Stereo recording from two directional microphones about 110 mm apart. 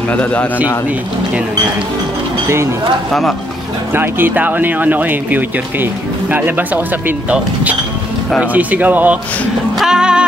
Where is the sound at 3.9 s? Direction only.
20° right (ahead or behind).